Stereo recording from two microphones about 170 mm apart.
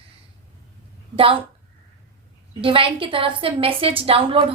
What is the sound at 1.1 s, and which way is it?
Speech, 30° right (ahead or behind).